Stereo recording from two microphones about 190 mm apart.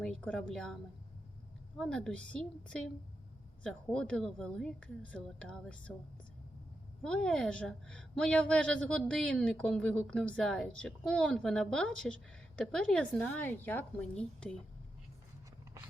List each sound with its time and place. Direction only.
0.0 s a woman's voice: 5° left (ahead or behind)
1.8 s a woman's voice: 5° left (ahead or behind)
7.0 s a woman's voice: 5° left (ahead or behind)